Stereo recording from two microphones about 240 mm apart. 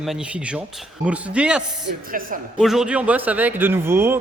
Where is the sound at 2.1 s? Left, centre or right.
Right.